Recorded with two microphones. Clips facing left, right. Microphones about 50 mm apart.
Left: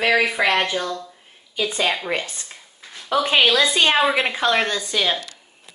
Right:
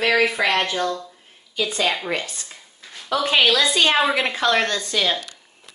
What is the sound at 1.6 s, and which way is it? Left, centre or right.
Speech, centre.